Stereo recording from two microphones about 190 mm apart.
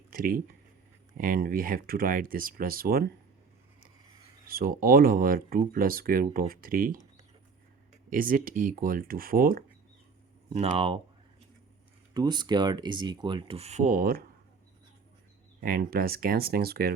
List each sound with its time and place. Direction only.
0.1 s speech: 50° right (ahead or behind)
4.4 s speech: 50° right (ahead or behind)
8.1 s speech: 45° right (ahead or behind)
10.5 s speech: 35° right (ahead or behind)
12.1 s speech: 20° right (ahead or behind); by 14.3 s 50° right (ahead or behind)
15.6 s speech: 50° right (ahead or behind)